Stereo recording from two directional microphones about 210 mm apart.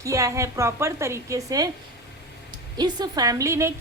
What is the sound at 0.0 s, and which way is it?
A woman's voice, 15° right (ahead or behind).